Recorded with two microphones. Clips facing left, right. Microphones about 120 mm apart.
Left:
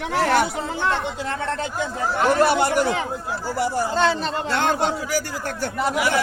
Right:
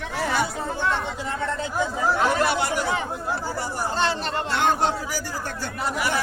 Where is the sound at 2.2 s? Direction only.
55° left (ahead or behind).